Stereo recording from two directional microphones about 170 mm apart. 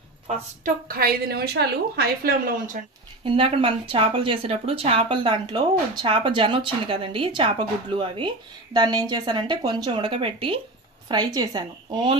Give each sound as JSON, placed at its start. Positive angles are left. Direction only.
{"t": 0.7, "sound": "a woman's voice", "side_deg": -60}
{"t": 3.3, "sound": "a woman's voice", "side_deg": -30}